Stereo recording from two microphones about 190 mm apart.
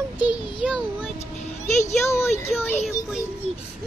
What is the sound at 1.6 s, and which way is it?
Speech, 35° left (ahead or behind).